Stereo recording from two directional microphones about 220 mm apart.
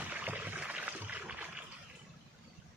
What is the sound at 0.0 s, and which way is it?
Boat, 5° right (ahead or behind).